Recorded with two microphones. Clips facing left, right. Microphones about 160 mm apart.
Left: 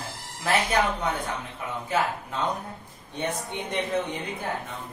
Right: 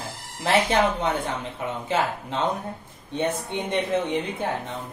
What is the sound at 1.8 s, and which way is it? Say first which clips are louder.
Speech: right 1 dB; 25° right (ahead or behind).